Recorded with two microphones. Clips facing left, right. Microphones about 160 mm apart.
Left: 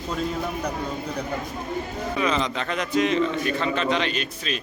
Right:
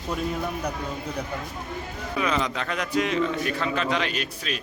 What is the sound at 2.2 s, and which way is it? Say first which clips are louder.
A man's voice: left 1 dB; 5° right (ahead or behind).